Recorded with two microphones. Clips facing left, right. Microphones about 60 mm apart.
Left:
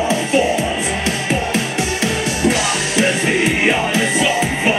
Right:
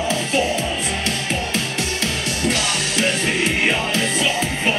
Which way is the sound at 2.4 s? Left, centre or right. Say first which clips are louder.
Left 4 dB; centre.